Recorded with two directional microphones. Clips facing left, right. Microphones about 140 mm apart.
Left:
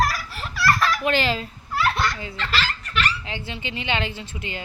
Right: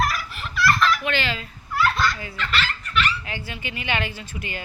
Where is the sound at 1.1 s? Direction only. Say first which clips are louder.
Left 4 dB; 35° left (ahead or behind).